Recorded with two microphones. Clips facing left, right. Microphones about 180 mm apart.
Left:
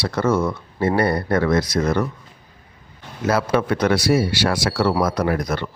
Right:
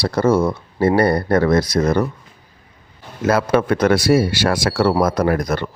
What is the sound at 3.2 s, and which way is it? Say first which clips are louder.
Speech: right 3 dB; 50° right (ahead or behind).